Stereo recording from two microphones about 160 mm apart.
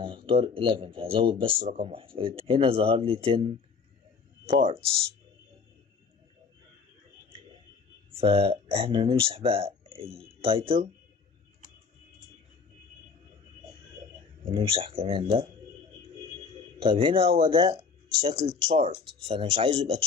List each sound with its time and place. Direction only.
0.0 s speech: 35° right (ahead or behind)
8.1 s speech: 35° right (ahead or behind)
14.4 s speech: 35° right (ahead or behind)
16.8 s speech: 35° right (ahead or behind)